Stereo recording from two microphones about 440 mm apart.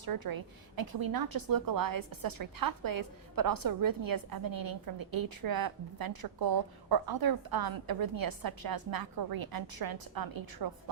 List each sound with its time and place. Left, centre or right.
0.0 s a woman's voice: right